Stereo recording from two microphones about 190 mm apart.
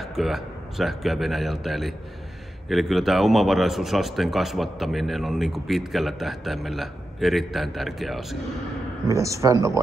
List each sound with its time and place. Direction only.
0.0 s speech: centre (ahead or behind)
9.1 s speech: 15° right (ahead or behind)